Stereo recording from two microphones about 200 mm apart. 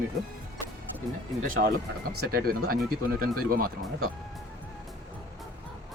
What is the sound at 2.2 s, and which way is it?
Speech, 50° right (ahead or behind).